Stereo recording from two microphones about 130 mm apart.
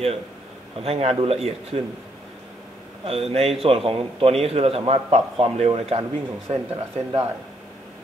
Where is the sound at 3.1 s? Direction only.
50° right (ahead or behind).